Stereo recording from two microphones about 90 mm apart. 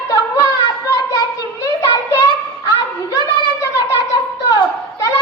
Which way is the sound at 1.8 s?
40° left (ahead or behind).